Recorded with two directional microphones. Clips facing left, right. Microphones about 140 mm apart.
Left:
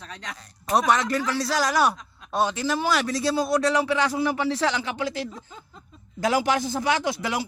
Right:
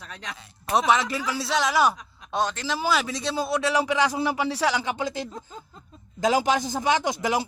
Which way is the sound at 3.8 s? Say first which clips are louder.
Even; 15° right (ahead or behind).